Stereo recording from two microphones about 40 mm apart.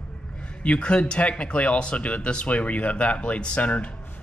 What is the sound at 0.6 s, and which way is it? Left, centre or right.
Speech, left.